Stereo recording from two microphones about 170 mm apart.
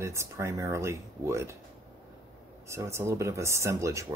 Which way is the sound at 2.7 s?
15° right (ahead or behind).